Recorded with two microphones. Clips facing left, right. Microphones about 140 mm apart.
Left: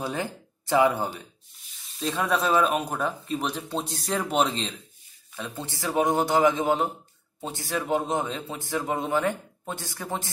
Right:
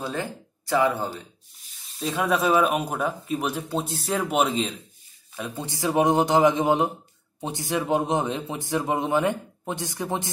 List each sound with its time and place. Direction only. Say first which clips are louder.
0.0 s speech: even; 20° left (ahead or behind)
2.0 s a man's voice: right 2 dB; 5° right (ahead or behind)